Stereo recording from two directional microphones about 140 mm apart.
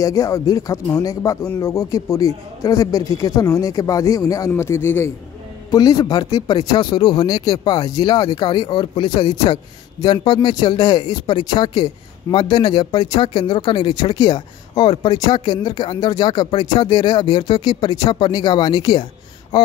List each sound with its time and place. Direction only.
0.0 s a man's voice: 25° left (ahead or behind)